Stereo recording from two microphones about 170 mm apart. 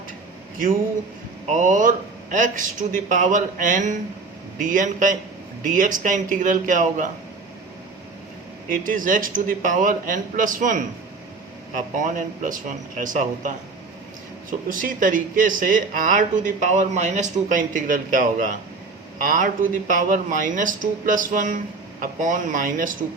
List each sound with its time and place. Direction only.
1.5 s speech: 45° right (ahead or behind)
8.7 s speech: 50° right (ahead or behind)
14.7 s speech: 55° right (ahead or behind)